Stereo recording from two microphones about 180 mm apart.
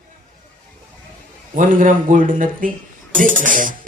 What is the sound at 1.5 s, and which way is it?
Speech, 45° right (ahead or behind).